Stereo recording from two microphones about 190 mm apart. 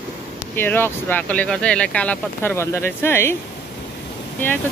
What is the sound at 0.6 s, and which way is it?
Speech, 10° left (ahead or behind).